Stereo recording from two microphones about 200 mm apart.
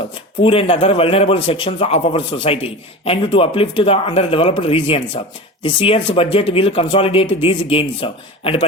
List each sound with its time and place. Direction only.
0.4 s a man's voice: 30° left (ahead or behind)